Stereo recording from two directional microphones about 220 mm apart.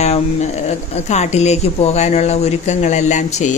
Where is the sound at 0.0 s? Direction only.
30° left (ahead or behind).